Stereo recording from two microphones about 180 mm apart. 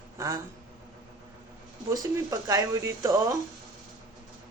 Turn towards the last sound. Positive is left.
turn(degrees=-20)  # may be behind; listen again after turning